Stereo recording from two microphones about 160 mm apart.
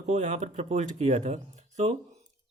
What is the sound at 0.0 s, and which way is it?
Speech, 45° right (ahead or behind).